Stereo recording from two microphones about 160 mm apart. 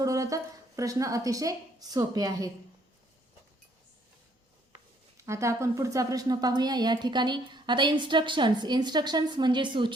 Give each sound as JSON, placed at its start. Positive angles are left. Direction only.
{"t": 0.0, "sound": "a woman's voice", "side_deg": -20}
{"t": 5.1, "sound": "a woman's voice", "side_deg": -20}